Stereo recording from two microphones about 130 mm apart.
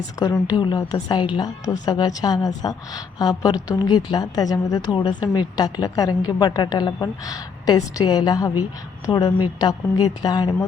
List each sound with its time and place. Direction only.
0.2 s a woman's voice: 30° left (ahead or behind)